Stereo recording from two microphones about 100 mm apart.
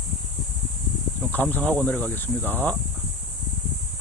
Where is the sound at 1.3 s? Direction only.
15° left (ahead or behind).